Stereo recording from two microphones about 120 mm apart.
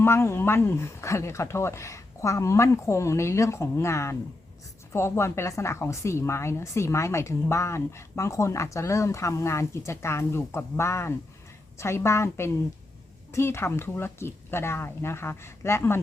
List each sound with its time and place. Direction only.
0.0 s speech: 20° left (ahead or behind)